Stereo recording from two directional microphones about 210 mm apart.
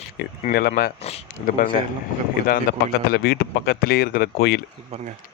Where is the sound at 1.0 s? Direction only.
30° left (ahead or behind).